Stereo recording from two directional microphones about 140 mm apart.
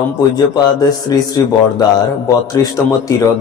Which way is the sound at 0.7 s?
25° left (ahead or behind).